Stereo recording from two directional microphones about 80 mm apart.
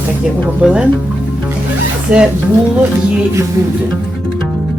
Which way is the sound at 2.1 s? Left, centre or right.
Centre.